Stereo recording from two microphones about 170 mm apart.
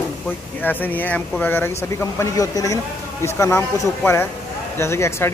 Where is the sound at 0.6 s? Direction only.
10° left (ahead or behind).